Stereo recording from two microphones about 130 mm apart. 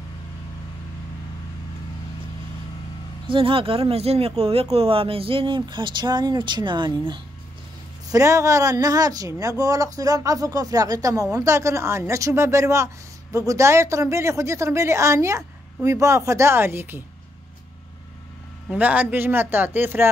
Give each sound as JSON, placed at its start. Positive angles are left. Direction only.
{"t": 3.3, "sound": "speech", "side_deg": -45}
{"t": 8.1, "sound": "speech", "side_deg": -25}
{"t": 18.7, "sound": "speech", "side_deg": -10}